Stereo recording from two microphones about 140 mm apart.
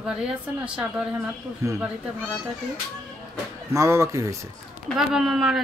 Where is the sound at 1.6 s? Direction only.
20° right (ahead or behind).